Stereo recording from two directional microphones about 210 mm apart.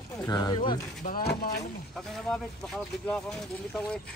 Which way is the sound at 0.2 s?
20° left (ahead or behind).